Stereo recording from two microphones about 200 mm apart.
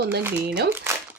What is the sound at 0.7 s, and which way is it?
Speech, 10° right (ahead or behind).